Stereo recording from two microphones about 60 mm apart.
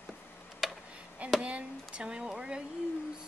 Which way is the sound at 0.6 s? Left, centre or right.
Centre.